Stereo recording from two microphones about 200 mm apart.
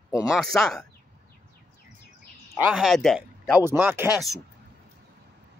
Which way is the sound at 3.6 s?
10° right (ahead or behind).